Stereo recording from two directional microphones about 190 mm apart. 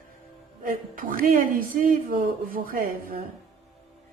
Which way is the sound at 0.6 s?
45° right (ahead or behind).